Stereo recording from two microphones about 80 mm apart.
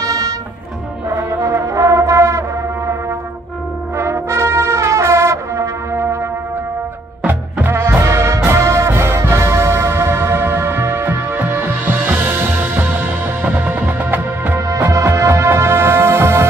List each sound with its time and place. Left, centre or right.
0.0 s music: right
1.1 s music: right
3.9 s brass instrument: right
7.2 s music: right
14.9 s music: right